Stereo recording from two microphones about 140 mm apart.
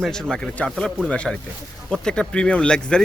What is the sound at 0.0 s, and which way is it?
Speech, 5° left (ahead or behind).